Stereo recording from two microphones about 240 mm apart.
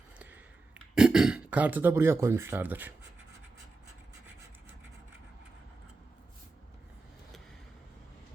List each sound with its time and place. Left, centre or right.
0.2 s throat clearing: centre